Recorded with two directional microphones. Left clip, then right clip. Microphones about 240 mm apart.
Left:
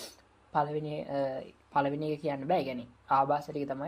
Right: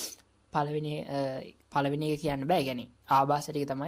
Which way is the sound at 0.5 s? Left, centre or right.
Right.